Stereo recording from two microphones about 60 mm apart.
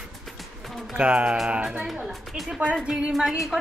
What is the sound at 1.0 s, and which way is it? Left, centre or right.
A woman's voice, right.